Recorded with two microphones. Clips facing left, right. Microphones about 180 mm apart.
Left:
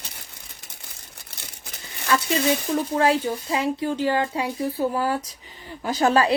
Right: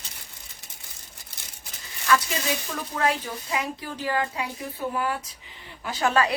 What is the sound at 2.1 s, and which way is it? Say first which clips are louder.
Speech: left 3 dB; 30° left (ahead or behind).